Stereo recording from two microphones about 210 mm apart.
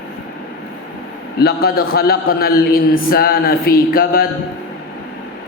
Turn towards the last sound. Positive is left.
turn(degrees=45)  # may be behind; listen again after turning